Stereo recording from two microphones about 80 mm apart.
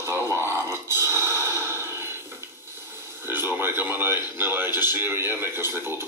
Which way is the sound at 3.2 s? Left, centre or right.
Right.